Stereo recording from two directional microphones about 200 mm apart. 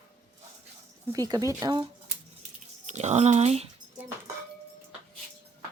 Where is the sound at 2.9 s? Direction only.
35° right (ahead or behind).